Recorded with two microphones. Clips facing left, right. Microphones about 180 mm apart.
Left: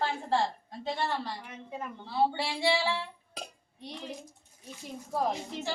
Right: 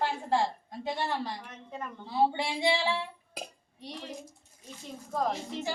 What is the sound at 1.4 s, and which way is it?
Speech, 10° left (ahead or behind).